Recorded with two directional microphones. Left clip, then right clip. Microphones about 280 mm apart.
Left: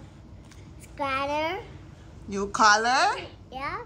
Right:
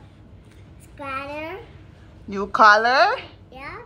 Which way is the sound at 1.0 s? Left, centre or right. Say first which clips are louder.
Left 3 dB; centre.